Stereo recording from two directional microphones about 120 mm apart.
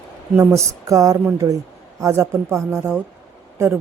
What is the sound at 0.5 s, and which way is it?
A woman's voice, 25° right (ahead or behind).